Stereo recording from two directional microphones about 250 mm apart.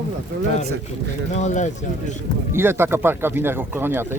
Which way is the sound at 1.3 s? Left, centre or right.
Left.